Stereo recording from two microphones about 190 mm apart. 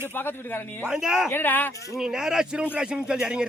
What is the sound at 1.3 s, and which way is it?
Speech, 10° left (ahead or behind).